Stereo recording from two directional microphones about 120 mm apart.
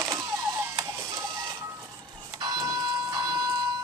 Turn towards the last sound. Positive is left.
turn(degrees=-35)  # may be behind; listen again after turning